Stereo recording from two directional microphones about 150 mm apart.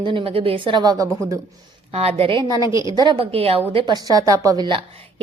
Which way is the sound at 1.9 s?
40° right (ahead or behind).